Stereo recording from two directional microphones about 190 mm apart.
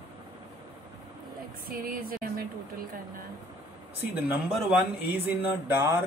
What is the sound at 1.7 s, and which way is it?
Music, 50° right (ahead or behind).